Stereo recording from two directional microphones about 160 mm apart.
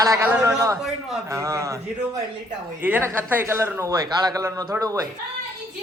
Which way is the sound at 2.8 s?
15° right (ahead or behind).